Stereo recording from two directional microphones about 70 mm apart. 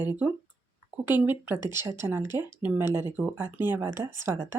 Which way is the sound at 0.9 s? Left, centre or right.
Right.